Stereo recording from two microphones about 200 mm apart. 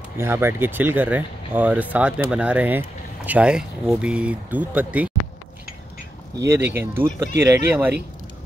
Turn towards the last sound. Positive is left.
turn(degrees=-10)  # may be behind; listen again after turning